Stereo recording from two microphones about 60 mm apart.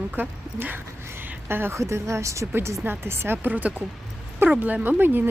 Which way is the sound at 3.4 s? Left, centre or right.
Right.